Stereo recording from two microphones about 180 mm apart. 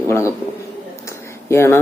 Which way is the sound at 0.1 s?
15° left (ahead or behind).